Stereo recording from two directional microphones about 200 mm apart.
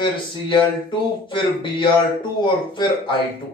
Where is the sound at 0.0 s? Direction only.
25° left (ahead or behind).